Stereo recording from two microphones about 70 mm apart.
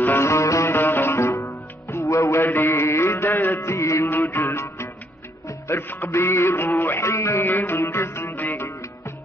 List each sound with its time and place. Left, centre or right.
0.0 s music: left
3.5 s music: left
4.1 s music: left
7.0 s music: left
7.4 s music: left